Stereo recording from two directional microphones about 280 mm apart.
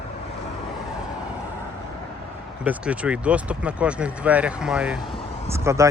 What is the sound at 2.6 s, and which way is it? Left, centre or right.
Speech, centre.